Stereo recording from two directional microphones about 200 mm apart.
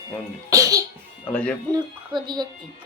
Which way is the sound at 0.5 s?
15° right (ahead or behind).